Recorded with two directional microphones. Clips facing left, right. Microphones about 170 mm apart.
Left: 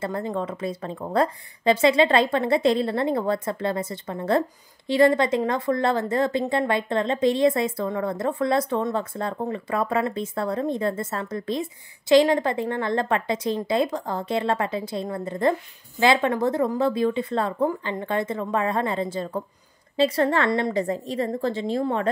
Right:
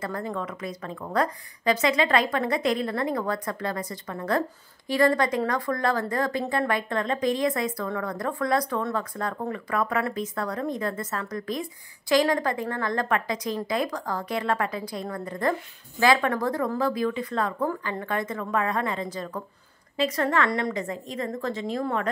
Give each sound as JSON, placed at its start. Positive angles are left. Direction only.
{"t": 0.0, "sound": "a woman's voice", "side_deg": 25}